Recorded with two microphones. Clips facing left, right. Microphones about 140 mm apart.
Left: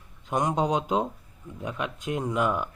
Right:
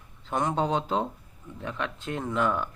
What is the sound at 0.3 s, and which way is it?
Speech, 15° left (ahead or behind).